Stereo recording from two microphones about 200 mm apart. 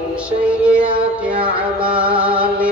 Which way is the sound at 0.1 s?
5° right (ahead or behind).